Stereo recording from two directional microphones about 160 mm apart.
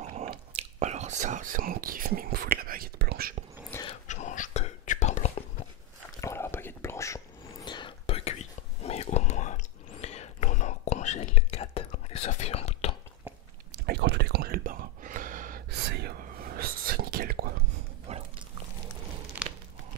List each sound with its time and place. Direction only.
0.0 s drip: 50° right (ahead or behind)
0.5 s whispering: 45° right (ahead or behind); by 3.3 s 75° right (ahead or behind)
3.7 s a sound: 15° left (ahead or behind)
4.1 s whispering: 50° left (ahead or behind)
6.2 s whispering: 15° left (ahead or behind); by 12.9 s 40° left (ahead or behind)
13.8 s whispering: 90° right; by 15.6 s 55° right (ahead or behind)
15.9 s whispering: 90° right; by 17.5 s 70° right (ahead or behind)
18.1 s dog: 45° right (ahead or behind)
19.4 s a sound: 10° right (ahead or behind)